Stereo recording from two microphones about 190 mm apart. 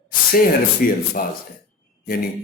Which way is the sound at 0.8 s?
50° left (ahead or behind).